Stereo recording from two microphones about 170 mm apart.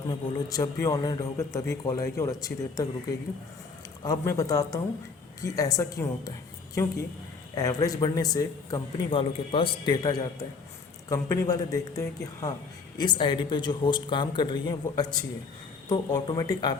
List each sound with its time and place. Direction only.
0.1 s a man's voice: 20° left (ahead or behind)
4.0 s a man's voice: 20° left (ahead or behind)
7.5 s a man's voice: 20° left (ahead or behind)